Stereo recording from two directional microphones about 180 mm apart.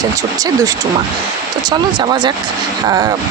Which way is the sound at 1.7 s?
25° right (ahead or behind).